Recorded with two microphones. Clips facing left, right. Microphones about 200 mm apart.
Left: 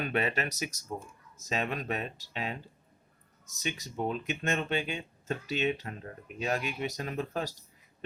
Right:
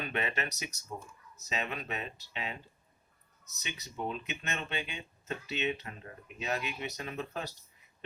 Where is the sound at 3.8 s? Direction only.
45° left (ahead or behind).